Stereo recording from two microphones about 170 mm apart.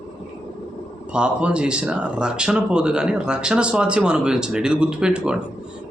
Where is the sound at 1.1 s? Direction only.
5° right (ahead or behind).